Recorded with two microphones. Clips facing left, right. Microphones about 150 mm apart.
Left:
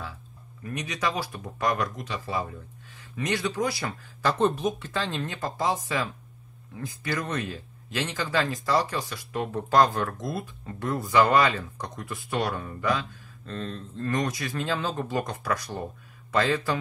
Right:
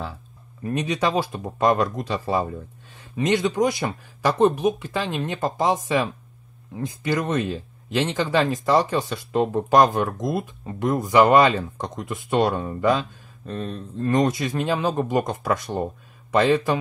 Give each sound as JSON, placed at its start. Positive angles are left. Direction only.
{"t": 0.7, "sound": "speech", "side_deg": -30}
{"t": 3.2, "sound": "speech", "side_deg": -20}
{"t": 13.5, "sound": "speech", "side_deg": -15}